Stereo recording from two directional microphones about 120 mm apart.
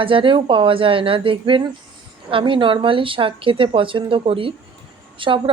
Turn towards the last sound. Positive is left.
turn(degrees=-45)  # may be behind; listen again after turning